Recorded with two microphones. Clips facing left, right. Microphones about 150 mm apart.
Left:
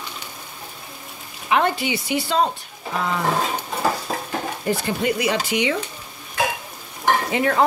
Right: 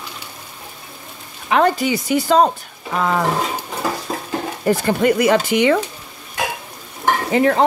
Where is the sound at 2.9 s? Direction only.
60° right (ahead or behind).